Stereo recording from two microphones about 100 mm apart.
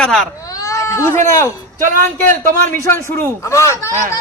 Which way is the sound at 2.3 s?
25° left (ahead or behind).